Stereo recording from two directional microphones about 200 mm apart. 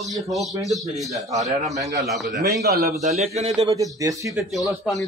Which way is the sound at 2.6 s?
50° right (ahead or behind).